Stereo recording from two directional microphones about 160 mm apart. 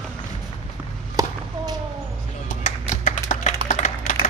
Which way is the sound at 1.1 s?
25° right (ahead or behind).